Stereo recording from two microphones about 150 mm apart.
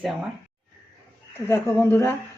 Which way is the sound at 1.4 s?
15° left (ahead or behind).